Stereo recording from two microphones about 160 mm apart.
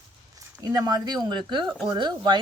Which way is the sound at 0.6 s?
20° right (ahead or behind).